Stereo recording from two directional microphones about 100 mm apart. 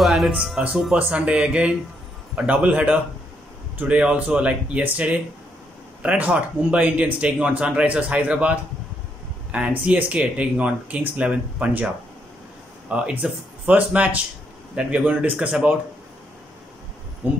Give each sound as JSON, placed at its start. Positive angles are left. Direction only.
{"t": 0.0, "sound": "music", "side_deg": 0}
{"t": 0.5, "sound": "speech", "side_deg": -5}
{"t": 17.2, "sound": "speech", "side_deg": -20}